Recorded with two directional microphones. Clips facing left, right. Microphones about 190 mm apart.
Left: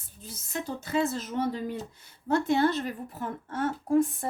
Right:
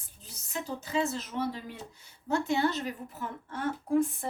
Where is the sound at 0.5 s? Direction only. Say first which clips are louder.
Left 2 dB; 50° left (ahead or behind).